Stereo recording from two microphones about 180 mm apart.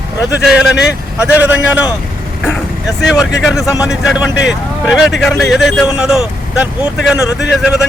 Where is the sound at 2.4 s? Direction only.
5° left (ahead or behind).